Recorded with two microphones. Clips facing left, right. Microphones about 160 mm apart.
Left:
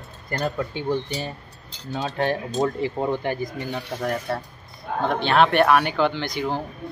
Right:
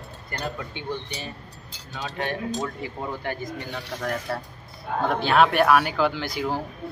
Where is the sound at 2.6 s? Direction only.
25° left (ahead or behind).